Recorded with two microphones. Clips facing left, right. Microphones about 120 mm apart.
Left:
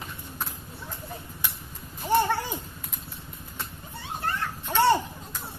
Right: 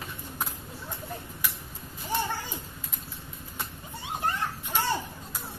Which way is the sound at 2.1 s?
75° left (ahead or behind).